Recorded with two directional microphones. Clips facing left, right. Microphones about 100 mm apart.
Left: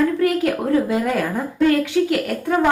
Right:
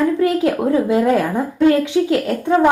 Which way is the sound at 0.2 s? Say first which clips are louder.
Right 3 dB; 20° right (ahead or behind).